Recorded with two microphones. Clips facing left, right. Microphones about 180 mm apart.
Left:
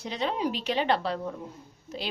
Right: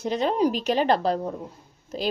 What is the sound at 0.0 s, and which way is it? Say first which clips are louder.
Speech: right 7 dB; 45° right (ahead or behind).